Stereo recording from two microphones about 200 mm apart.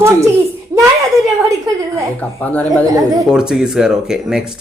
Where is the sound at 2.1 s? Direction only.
5° left (ahead or behind).